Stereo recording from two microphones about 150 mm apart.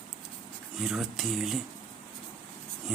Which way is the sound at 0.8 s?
5° right (ahead or behind).